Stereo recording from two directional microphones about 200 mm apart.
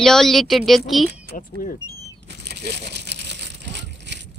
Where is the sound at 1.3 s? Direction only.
40° left (ahead or behind).